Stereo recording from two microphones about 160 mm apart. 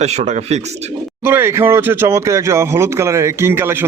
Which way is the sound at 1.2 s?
15° right (ahead or behind).